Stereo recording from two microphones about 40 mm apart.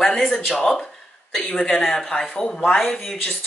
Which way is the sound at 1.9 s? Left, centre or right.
Centre.